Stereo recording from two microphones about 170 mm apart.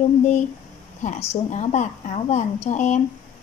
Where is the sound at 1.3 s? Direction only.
40° left (ahead or behind).